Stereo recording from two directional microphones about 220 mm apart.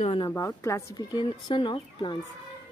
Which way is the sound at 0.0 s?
25° left (ahead or behind).